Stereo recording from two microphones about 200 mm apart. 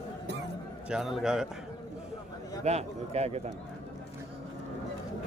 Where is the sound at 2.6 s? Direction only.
30° right (ahead or behind).